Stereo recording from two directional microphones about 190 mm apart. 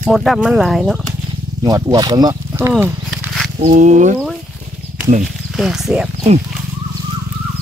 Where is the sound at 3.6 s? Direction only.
40° right (ahead or behind).